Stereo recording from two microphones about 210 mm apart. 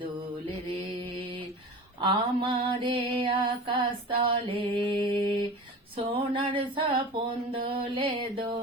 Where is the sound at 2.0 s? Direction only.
25° right (ahead or behind).